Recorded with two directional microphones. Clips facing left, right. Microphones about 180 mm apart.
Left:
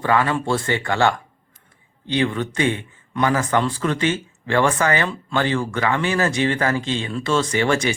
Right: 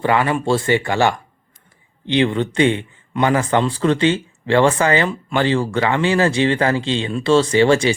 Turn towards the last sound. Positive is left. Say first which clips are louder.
# right 6 dB
turn(degrees=-25)  # may be behind; listen again after turning